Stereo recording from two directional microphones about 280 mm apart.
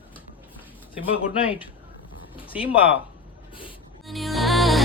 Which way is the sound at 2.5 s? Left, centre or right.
Centre.